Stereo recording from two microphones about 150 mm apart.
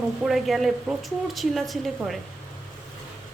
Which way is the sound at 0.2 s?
Centre (ahead or behind).